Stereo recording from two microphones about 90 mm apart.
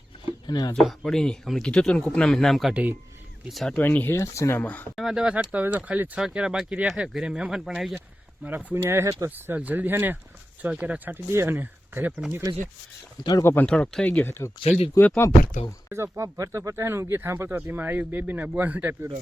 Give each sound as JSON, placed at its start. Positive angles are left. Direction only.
{"t": 0.3, "sound": "a sound", "side_deg": 50}
{"t": 0.8, "sound": "speech", "side_deg": 5}
{"t": 3.8, "sound": "speech", "side_deg": 20}
{"t": 4.6, "sound": "speech", "side_deg": 20}
{"t": 4.9, "sound": "speech", "side_deg": -5}
{"t": 8.4, "sound": "speech", "side_deg": -25}
{"t": 9.0, "sound": "speech", "side_deg": -40}
{"t": 9.3, "sound": "speech", "side_deg": -20}
{"t": 12.3, "sound": "speech", "side_deg": -35}
{"t": 13.4, "sound": "speech", "side_deg": 25}
{"t": 13.7, "sound": "speech", "side_deg": 10}
{"t": 15.9, "sound": "speech", "side_deg": -30}